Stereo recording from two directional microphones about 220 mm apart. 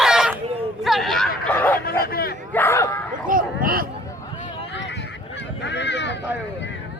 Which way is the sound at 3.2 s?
40° right (ahead or behind).